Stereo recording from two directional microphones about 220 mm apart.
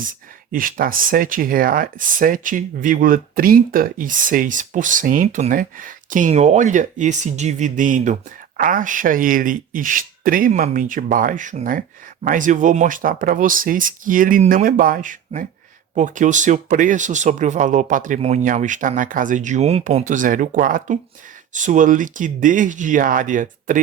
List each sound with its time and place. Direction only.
0.0 s speech: 40° right (ahead or behind)